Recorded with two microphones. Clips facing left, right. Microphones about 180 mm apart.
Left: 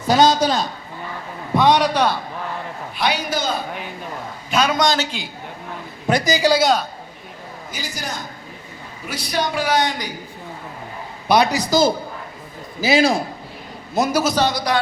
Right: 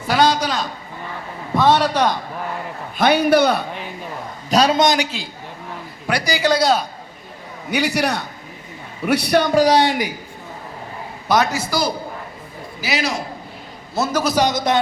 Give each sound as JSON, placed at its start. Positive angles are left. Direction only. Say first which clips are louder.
{"t": 0.0, "sound": "a man's voice", "louder": "left 2 dB", "side_deg": 20}
{"t": 1.5, "sound": "a man's voice", "louder": "even", "side_deg": 15}
{"t": 3.0, "sound": "a man's voice", "louder": "right 8 dB", "side_deg": -55}
{"t": 4.4, "sound": "a man's voice", "louder": "right 4 dB", "side_deg": -35}
{"t": 4.8, "sound": "a man's voice", "louder": "right 2 dB", "side_deg": -20}
{"t": 6.1, "sound": "a man's voice", "louder": "left 2 dB", "side_deg": 20}
{"t": 6.6, "sound": "a man's voice", "louder": "even", "side_deg": 0}
{"t": 7.7, "sound": "a man's voice", "louder": "right 11 dB", "side_deg": -70}
{"t": 9.6, "sound": "a woman's voice", "louder": "right 5 dB", "side_deg": -30}
{"t": 11.3, "sound": "a man's voice", "louder": "left 2 dB", "side_deg": 15}
{"t": 11.7, "sound": "a man's voice", "louder": "left 5 dB", "side_deg": 25}
{"t": 13.9, "sound": "a man's voice", "louder": "left 2 dB", "side_deg": 15}
{"t": 14.3, "sound": "speech", "louder": "right 2 dB", "side_deg": -20}